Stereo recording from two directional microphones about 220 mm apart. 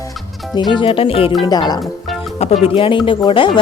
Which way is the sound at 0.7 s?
25° left (ahead or behind).